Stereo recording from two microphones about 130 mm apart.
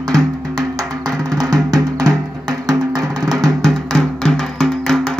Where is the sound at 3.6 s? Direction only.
Centre (ahead or behind).